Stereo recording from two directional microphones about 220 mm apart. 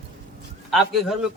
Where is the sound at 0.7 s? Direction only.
Centre (ahead or behind).